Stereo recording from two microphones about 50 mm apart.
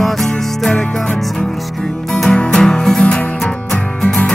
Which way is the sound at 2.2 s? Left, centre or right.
Centre.